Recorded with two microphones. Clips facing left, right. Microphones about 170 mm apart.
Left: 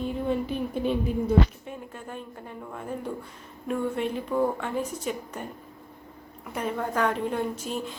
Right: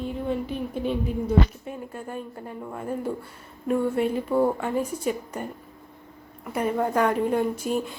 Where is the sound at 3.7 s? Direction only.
5° right (ahead or behind).